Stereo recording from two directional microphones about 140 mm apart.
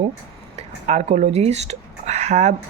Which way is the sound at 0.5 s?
50° right (ahead or behind).